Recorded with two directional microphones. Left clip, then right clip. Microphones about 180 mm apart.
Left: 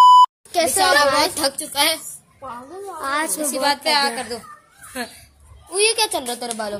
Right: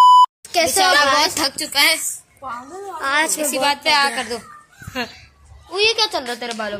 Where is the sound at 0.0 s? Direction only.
Centre (ahead or behind).